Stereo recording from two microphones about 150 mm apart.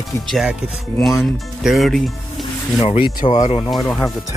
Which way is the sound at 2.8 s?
35° left (ahead or behind).